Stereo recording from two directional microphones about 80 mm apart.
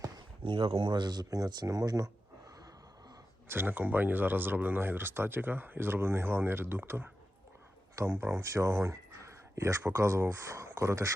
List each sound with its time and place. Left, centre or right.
0.4 s speech: right
3.5 s speech: right